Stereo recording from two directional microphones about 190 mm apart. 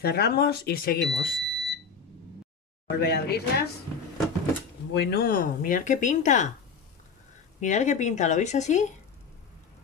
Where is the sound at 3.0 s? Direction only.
60° left (ahead or behind).